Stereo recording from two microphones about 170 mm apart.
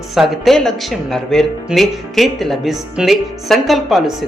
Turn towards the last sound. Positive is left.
turn(degrees=0)  # may be behind; listen again after turning